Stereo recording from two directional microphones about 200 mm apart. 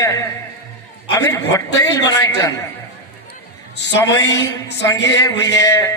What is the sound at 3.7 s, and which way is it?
Speech, 60° left (ahead or behind).